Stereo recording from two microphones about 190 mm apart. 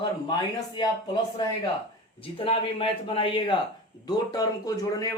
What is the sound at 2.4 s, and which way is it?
Speech, 30° left (ahead or behind).